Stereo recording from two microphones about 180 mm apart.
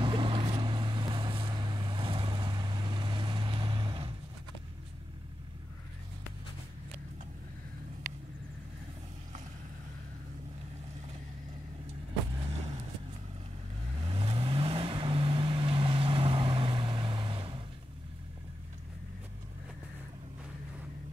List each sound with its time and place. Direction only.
0.0 s vehicle: 30° right (ahead or behind)
14.0 s vehicle: 30° right (ahead or behind)